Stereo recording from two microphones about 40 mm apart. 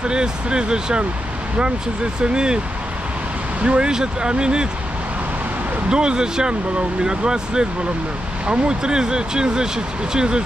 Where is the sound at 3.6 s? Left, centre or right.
Right.